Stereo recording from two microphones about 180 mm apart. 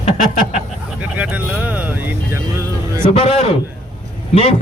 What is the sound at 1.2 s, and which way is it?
Speech, 10° right (ahead or behind).